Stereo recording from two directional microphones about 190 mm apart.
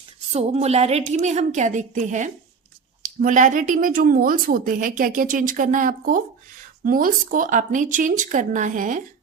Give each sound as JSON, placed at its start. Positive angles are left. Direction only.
{"t": 0.3, "sound": "a woman's voice", "side_deg": -35}